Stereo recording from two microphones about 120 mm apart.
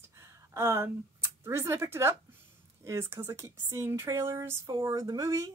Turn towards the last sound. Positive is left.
turn(degrees=-25)  # may be behind; listen again after turning